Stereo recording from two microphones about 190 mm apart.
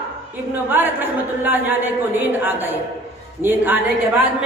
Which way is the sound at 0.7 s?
10° right (ahead or behind).